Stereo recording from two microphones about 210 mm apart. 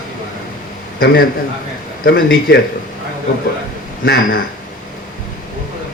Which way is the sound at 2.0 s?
45° left (ahead or behind).